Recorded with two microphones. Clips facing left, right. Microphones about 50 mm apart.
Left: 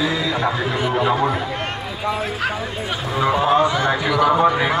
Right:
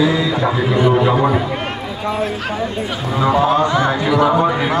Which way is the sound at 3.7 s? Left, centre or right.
Centre.